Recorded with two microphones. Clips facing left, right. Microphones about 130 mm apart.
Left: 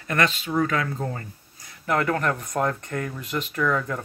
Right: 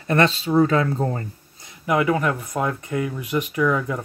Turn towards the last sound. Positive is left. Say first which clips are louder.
# right 3 dB
turn(degrees=-10)  # may be behind; listen again after turning